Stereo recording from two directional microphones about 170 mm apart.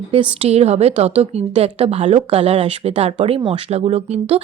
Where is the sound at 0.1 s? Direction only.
30° right (ahead or behind).